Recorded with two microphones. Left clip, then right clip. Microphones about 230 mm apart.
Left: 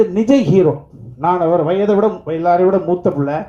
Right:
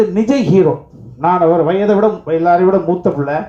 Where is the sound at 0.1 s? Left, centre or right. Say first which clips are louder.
Even; left.